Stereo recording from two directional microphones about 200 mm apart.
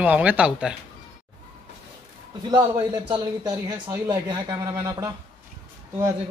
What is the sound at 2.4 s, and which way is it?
A man's voice, 20° right (ahead or behind).